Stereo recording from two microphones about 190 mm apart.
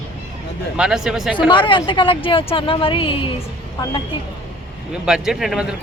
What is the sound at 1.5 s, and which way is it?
Speech, 25° left (ahead or behind).